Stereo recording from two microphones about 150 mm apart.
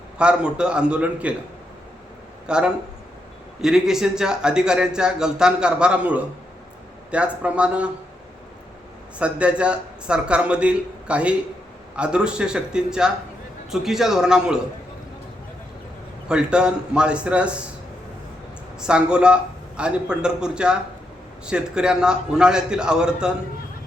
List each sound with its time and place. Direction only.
0.2 s a man's voice: 5° right (ahead or behind)
2.5 s a man's voice: 5° right (ahead or behind)
9.1 s a man's voice: 10° right (ahead or behind)
16.3 s a man's voice: 5° right (ahead or behind)
18.8 s a man's voice: 5° right (ahead or behind)